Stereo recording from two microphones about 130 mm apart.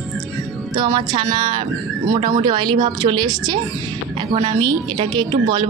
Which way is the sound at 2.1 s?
50° right (ahead or behind).